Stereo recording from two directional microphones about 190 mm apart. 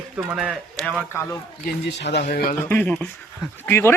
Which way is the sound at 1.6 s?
65° left (ahead or behind).